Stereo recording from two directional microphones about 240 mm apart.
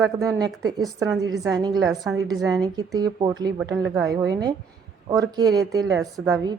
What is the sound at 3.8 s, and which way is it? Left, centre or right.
Speech, centre.